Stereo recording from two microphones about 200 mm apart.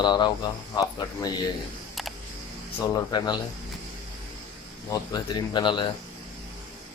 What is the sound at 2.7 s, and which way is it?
Speech, 20° left (ahead or behind).